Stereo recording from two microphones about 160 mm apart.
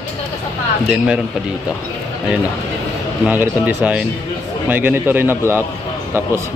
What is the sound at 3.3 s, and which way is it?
A man's voice, 10° right (ahead or behind).